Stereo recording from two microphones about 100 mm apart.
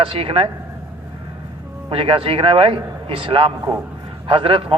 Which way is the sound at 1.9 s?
60° right (ahead or behind).